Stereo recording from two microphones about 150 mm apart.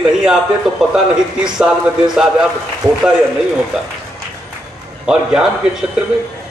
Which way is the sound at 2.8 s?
25° right (ahead or behind).